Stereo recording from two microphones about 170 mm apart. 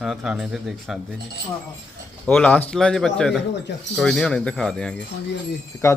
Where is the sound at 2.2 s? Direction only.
5° left (ahead or behind).